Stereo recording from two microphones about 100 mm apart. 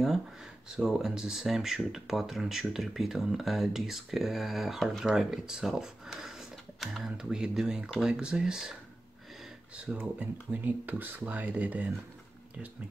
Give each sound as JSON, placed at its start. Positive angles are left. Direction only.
{"t": 0.7, "sound": "speech", "side_deg": -5}
{"t": 9.8, "sound": "speech", "side_deg": -15}